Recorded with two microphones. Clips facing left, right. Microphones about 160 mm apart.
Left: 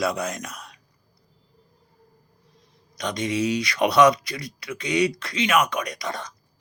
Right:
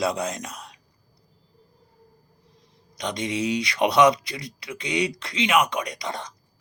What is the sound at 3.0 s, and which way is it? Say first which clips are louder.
Speech: left 2 dB; 20° right (ahead or behind).